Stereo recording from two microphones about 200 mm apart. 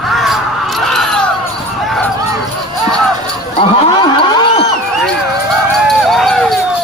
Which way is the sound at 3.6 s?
30° left (ahead or behind).